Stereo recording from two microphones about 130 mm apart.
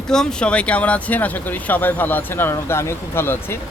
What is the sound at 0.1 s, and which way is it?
A man's voice, 5° left (ahead or behind).